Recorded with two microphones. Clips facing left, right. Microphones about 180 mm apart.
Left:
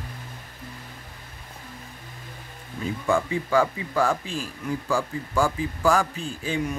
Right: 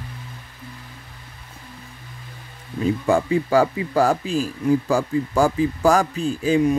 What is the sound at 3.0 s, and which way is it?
Speech, 40° right (ahead or behind).